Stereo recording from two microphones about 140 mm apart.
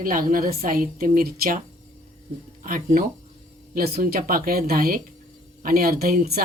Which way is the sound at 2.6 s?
85° right.